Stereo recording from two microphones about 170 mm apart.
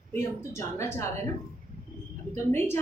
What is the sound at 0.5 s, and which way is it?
Speech, 15° left (ahead or behind).